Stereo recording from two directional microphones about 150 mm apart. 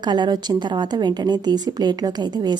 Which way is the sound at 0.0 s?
30° right (ahead or behind).